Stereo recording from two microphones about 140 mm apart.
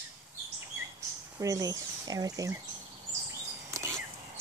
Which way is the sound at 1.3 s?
25° right (ahead or behind).